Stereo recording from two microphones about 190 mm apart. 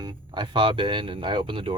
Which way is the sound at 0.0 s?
25° right (ahead or behind).